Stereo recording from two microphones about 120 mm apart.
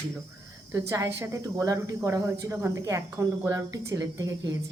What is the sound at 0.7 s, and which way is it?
Speech, 25° right (ahead or behind).